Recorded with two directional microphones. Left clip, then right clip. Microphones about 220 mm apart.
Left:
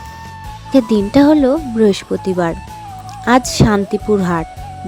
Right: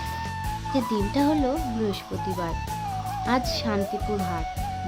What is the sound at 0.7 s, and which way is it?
Speech, 40° left (ahead or behind).